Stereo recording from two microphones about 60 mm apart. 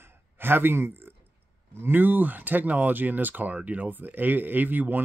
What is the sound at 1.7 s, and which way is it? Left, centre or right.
Speech, right.